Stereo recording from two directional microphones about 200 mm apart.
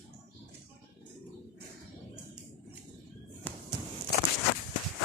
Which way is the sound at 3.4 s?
10° left (ahead or behind).